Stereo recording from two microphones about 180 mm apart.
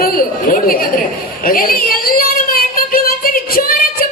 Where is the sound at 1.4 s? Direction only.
55° left (ahead or behind).